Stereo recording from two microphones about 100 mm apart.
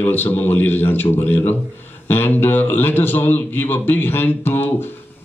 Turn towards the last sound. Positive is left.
turn(degrees=20)  # may be behind; listen again after turning